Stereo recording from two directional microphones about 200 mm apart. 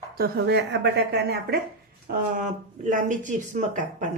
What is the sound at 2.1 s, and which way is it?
Speech, 40° right (ahead or behind).